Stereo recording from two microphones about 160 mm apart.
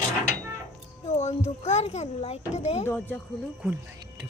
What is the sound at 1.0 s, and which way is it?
A child's voice, 45° left (ahead or behind).